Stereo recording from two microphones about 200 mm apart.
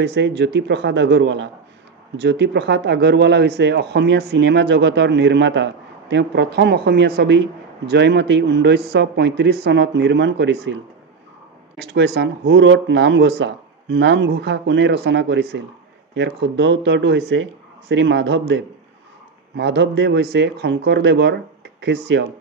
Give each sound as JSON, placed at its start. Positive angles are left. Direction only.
{"t": 0.0, "sound": "speech", "side_deg": -55}